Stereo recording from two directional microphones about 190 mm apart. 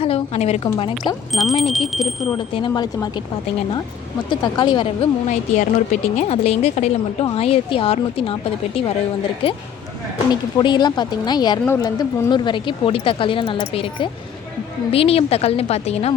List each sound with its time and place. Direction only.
0.0 s a woman's voice: 30° left (ahead or behind)
1.3 s speech: centre (ahead or behind)
2.6 s speech: 20° left (ahead or behind)
4.3 s speech: 25° left (ahead or behind)
5.3 s speech: 40° left (ahead or behind)
10.6 s speech: 25° left (ahead or behind)